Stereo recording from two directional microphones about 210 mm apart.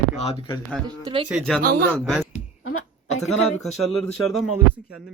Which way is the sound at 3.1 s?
30° left (ahead or behind).